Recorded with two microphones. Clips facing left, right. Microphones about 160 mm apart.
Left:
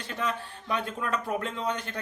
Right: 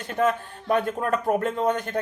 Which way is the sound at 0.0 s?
50° right (ahead or behind).